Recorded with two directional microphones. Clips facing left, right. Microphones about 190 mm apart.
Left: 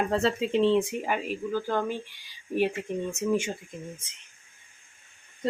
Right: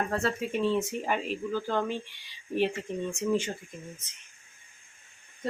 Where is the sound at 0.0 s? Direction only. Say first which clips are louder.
Left 4 dB; 25° left (ahead or behind).